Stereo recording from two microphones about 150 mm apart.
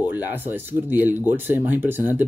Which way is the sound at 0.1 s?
15° right (ahead or behind).